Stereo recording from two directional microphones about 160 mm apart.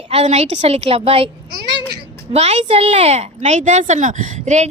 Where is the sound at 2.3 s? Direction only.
40° right (ahead or behind).